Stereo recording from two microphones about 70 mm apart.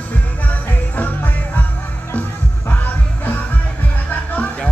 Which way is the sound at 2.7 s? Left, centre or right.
Left.